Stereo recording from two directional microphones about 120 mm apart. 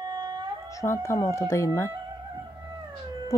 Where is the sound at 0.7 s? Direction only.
20° left (ahead or behind).